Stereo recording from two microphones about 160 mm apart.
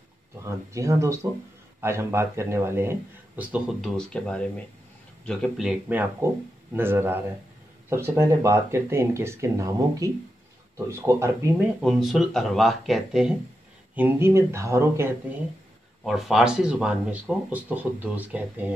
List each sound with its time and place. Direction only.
0.7 s speech: 20° right (ahead or behind)
6.3 s speech: 15° right (ahead or behind)
11.8 s speech: centre (ahead or behind)
13.9 s speech: 15° right (ahead or behind)
16.0 s speech: centre (ahead or behind)